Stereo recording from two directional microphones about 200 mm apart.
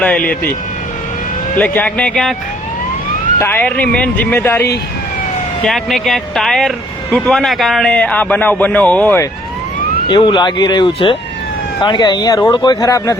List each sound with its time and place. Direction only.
0.0 s speech: 5° left (ahead or behind)
1.5 s speech: 10° left (ahead or behind)
3.3 s speech: 10° left (ahead or behind)
5.6 s speech: centre (ahead or behind)
10.1 s speech: 20° left (ahead or behind)